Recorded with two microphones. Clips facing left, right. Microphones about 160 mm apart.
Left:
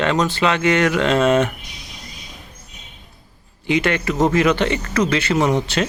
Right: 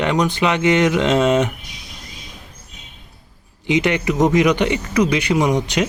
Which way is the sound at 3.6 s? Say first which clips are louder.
Right 1 dB; 20° right (ahead or behind).